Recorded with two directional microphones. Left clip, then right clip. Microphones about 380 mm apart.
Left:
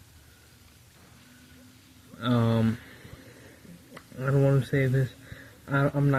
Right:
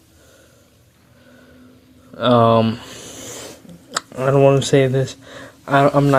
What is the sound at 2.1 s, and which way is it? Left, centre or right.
Speech, centre.